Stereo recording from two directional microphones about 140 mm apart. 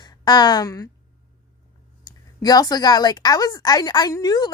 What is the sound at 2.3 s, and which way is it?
A woman's voice, 25° left (ahead or behind).